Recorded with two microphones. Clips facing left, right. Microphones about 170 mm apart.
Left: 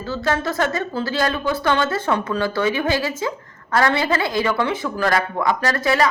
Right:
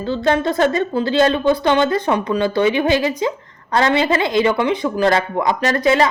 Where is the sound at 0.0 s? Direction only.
20° right (ahead or behind).